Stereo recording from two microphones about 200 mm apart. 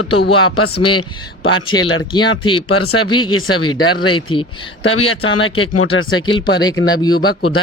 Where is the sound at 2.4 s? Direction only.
25° left (ahead or behind).